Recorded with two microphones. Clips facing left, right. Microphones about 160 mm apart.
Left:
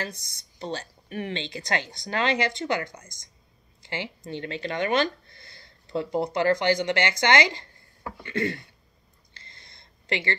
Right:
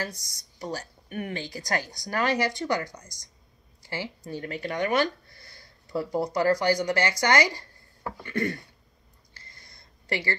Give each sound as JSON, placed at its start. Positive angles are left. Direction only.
{"t": 0.6, "sound": "speech", "side_deg": 25}
{"t": 2.8, "sound": "a woman's voice", "side_deg": 55}
{"t": 3.8, "sound": "speech", "side_deg": 20}
{"t": 9.4, "sound": "a sound", "side_deg": 25}